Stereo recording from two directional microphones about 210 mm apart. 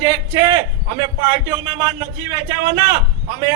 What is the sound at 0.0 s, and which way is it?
A man's voice, 15° right (ahead or behind).